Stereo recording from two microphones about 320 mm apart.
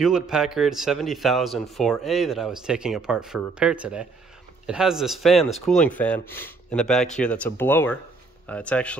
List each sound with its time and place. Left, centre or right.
0.0 s speech: centre